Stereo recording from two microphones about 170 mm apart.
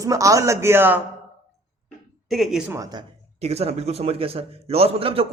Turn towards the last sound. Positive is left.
turn(degrees=-35)  # may be behind; listen again after turning